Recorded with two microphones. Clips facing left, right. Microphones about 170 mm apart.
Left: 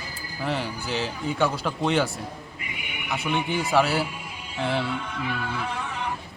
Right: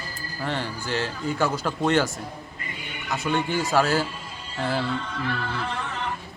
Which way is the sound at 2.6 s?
15° left (ahead or behind).